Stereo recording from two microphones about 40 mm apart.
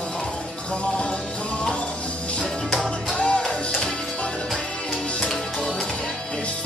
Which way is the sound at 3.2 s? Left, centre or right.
Left.